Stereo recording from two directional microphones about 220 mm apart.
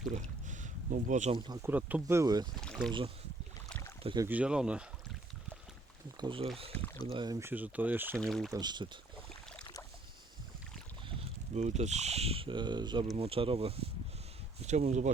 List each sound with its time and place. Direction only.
0.1 s boat: 35° right (ahead or behind)
1.5 s speech: 15° right (ahead or behind)
2.6 s speech: centre (ahead or behind)
3.7 s rowboat: 10° left (ahead or behind)
4.0 s speech: 20° right (ahead or behind)
4.3 s speech: 5° right (ahead or behind)
6.1 s speech: 20° right (ahead or behind)
6.7 s speech: 10° left (ahead or behind)
7.1 s speech: 20° right (ahead or behind)
8.2 s speech: centre (ahead or behind)
8.5 s speech: 20° right (ahead or behind)
11.5 s speech: 30° right (ahead or behind)